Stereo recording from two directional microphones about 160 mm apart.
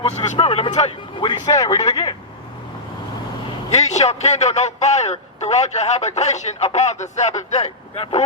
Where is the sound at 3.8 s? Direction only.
45° left (ahead or behind).